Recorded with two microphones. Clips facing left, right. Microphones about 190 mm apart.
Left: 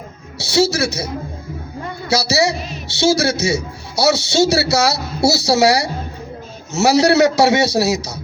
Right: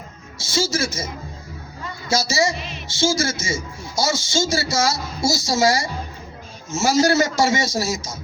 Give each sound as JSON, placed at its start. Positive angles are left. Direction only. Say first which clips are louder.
{"t": 0.3, "sound": "a man's voice", "louder": "left 7 dB", "side_deg": 65}
{"t": 1.8, "sound": "a sound", "louder": "left 3 dB", "side_deg": 60}
{"t": 2.8, "sound": "a man's voice", "louder": "left 5 dB", "side_deg": 70}